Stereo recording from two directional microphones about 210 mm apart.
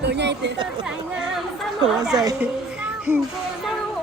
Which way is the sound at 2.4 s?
5° right (ahead or behind).